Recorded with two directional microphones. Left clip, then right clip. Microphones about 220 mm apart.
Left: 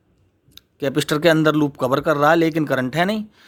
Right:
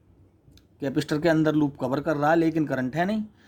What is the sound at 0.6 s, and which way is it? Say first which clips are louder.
Speech: left 7 dB; 30° left (ahead or behind).